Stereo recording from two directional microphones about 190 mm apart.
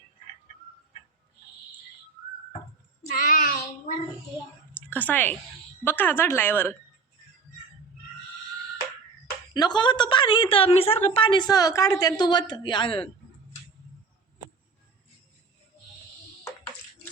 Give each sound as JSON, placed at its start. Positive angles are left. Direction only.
{"t": 3.2, "sound": "child singing", "side_deg": 45}
{"t": 4.9, "sound": "speech", "side_deg": 10}
{"t": 9.5, "sound": "a woman's voice", "side_deg": 20}